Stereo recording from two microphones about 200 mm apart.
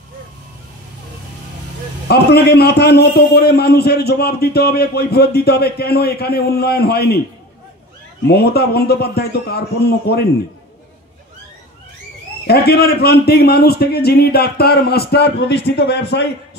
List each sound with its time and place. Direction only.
2.0 s a man's voice: 55° left (ahead or behind)
8.3 s a man's voice: 50° left (ahead or behind)
12.4 s a man's voice: 50° left (ahead or behind)